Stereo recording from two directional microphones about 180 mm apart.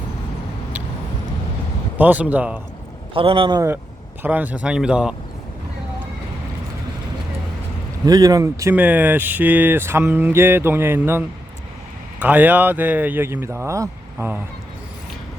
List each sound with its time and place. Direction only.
2.0 s speech: 10° right (ahead or behind)
3.2 s a man's voice: 30° right (ahead or behind)
4.2 s speech: 10° right (ahead or behind)
8.0 s speech: 20° right (ahead or behind)
12.2 s speech: 10° right (ahead or behind)